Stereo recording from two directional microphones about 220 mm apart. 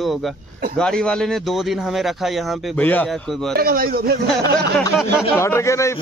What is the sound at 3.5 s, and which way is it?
Speech, 40° right (ahead or behind).